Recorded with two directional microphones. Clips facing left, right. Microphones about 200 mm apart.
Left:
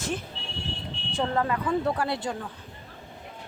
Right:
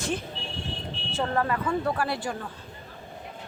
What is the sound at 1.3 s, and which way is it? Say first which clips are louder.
Speech: even; 20° left (ahead or behind).